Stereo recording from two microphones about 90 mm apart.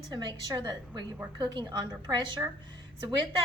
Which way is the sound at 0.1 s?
50° right (ahead or behind).